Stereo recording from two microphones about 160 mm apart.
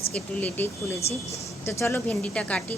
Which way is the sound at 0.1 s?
10° left (ahead or behind).